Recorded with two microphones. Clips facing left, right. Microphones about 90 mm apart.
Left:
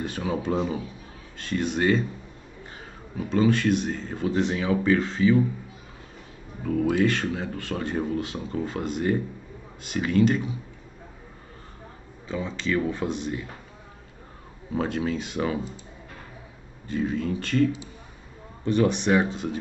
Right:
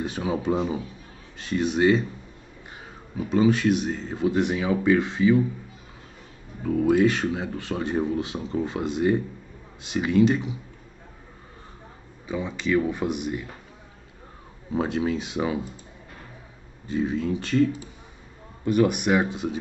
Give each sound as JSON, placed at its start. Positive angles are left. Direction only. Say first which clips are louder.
{"t": 0.0, "sound": "speech", "louder": "right 2 dB", "side_deg": -15}
{"t": 3.2, "sound": "speech", "louder": "right 1 dB", "side_deg": -10}
{"t": 6.6, "sound": "speech", "louder": "right 3 dB", "side_deg": -10}
{"t": 12.3, "sound": "speech", "louder": "right 2 dB", "side_deg": -15}
{"t": 14.7, "sound": "speech", "louder": "right 2 dB", "side_deg": -15}
{"t": 16.8, "sound": "speech", "louder": "right 1 dB", "side_deg": -15}